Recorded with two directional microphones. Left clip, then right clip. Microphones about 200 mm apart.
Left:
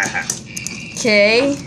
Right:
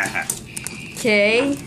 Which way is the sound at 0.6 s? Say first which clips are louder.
Left 2 dB; 5° left (ahead or behind).